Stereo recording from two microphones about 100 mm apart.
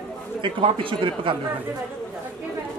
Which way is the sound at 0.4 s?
55° right (ahead or behind).